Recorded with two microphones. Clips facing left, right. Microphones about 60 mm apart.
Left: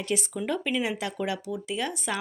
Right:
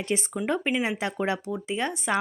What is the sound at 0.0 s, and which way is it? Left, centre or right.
A woman's voice, right.